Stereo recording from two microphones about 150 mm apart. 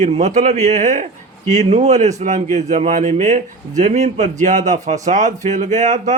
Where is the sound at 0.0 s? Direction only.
55° right (ahead or behind).